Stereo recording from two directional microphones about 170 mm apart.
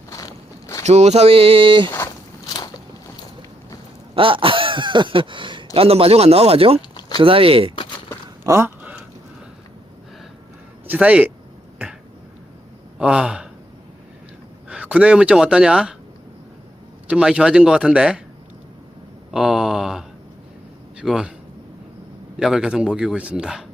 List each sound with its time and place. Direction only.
0.9 s speech: 40° right (ahead or behind)
4.1 s a sound: 30° right (ahead or behind)
5.7 s speech: 35° right (ahead or behind)
8.4 s a sound: 15° right (ahead or behind)
10.8 s speech: 10° right (ahead or behind)
13.0 s speech: 5° right (ahead or behind)
14.7 s speech: 5° right (ahead or behind)
17.1 s speech: 5° right (ahead or behind)
19.3 s speech: 5° right (ahead or behind)
22.4 s speech: 5° right (ahead or behind)